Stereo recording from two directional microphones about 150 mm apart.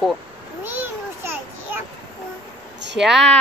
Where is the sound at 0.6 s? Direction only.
15° right (ahead or behind).